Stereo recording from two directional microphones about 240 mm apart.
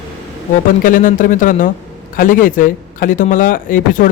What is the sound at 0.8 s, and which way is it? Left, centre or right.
A man's voice, left.